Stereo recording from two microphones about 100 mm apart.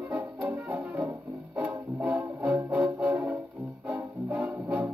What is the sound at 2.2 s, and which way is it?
Music, 30° right (ahead or behind).